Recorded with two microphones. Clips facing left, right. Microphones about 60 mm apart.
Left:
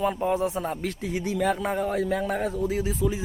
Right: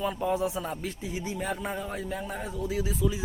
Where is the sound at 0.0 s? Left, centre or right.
Left.